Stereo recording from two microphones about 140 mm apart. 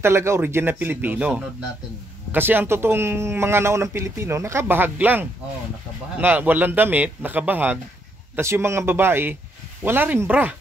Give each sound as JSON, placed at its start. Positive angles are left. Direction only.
{"t": 0.0, "sound": "speech", "side_deg": -20}